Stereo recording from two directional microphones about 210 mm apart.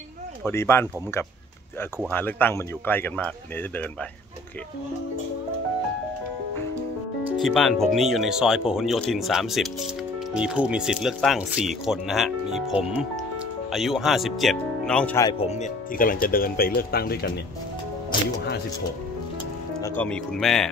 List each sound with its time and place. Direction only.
0.5 s a man's voice: 10° left (ahead or behind)
7.3 s speech: centre (ahead or behind)
15.2 s speech: 30° left (ahead or behind); by 17.3 s 45° left (ahead or behind)
19.8 s speech: 5° left (ahead or behind)